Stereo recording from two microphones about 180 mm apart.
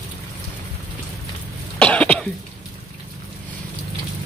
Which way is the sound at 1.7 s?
5° left (ahead or behind).